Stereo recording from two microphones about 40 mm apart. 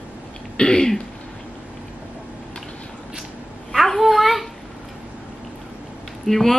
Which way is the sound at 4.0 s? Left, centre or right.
Centre.